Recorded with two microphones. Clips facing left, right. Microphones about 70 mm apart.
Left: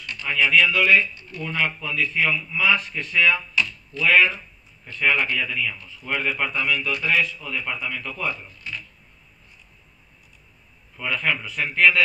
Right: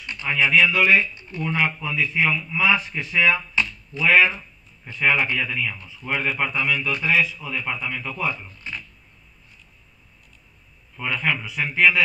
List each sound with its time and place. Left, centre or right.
0.0 s a sound: right
0.5 s speech: centre
1.4 s speech: centre
11.0 s speech: centre